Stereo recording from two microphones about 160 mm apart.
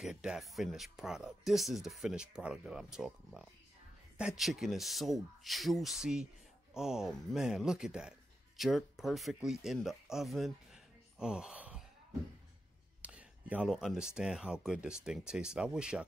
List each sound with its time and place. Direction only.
0.0 s speech: 5° right (ahead or behind)
13.0 s speech: 10° right (ahead or behind)